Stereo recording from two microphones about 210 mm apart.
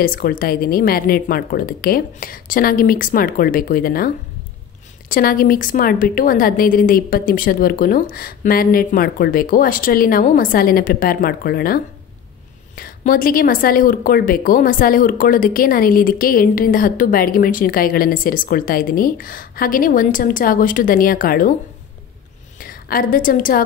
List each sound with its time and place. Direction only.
0.0 s speech: 45° left (ahead or behind)
5.1 s speech: 45° left (ahead or behind)
22.6 s a woman's voice: 45° left (ahead or behind)